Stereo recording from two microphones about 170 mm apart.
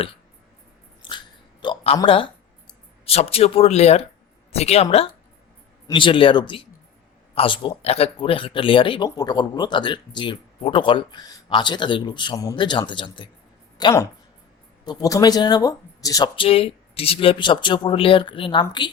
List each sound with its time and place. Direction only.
1.0 s biting: 30° left (ahead or behind)
1.6 s a sound: 35° left (ahead or behind)
2.0 s speech: 30° left (ahead or behind)